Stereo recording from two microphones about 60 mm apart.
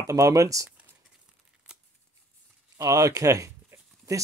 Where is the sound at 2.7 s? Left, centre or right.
Right.